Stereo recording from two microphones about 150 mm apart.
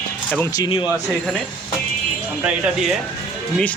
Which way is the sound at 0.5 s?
30° left (ahead or behind).